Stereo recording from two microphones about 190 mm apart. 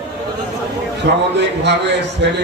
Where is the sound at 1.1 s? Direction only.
65° right (ahead or behind).